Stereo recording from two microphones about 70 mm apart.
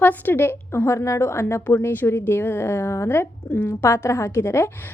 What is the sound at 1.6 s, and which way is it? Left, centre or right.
A woman's voice, left.